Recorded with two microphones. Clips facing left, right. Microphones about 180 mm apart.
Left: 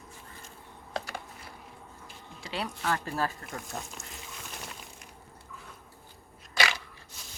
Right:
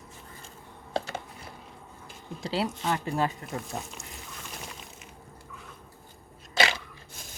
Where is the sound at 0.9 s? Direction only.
25° right (ahead or behind).